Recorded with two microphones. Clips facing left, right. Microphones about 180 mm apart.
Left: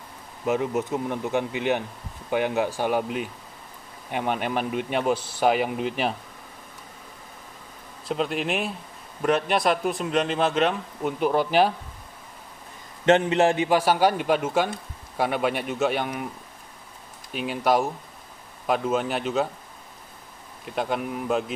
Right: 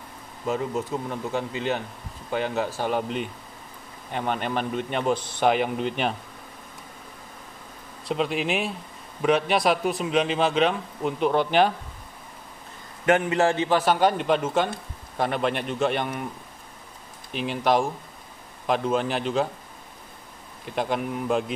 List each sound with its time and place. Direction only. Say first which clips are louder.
0.5 s a man's voice: left 2 dB; 20° left (ahead or behind)
8.1 s speech: right 1 dB; centre (ahead or behind)
13.0 s a man's voice: left 2 dB; 25° left (ahead or behind); by 16.3 s 5° left (ahead or behind)
17.3 s speech: even; 5° left (ahead or behind)
20.6 s speech: right 1 dB; centre (ahead or behind)